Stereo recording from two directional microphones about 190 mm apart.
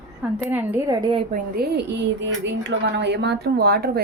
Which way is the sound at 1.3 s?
55° right (ahead or behind).